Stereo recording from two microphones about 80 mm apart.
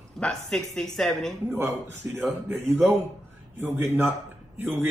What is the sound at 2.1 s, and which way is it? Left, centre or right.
A man's voice, right.